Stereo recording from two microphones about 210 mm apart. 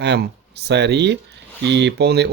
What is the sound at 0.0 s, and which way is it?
Speech, 55° right (ahead or behind).